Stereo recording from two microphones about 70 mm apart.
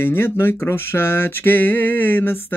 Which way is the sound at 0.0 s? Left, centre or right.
Left.